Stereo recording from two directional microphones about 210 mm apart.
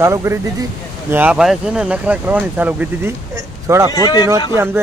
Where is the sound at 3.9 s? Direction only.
20° left (ahead or behind).